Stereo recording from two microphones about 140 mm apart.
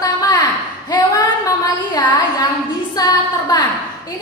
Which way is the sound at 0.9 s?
30° left (ahead or behind).